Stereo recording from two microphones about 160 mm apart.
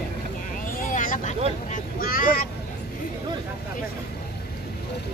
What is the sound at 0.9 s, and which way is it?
Vehicle, 55° left (ahead or behind).